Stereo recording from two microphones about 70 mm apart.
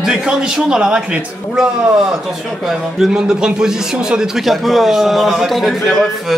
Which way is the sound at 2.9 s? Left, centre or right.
Centre.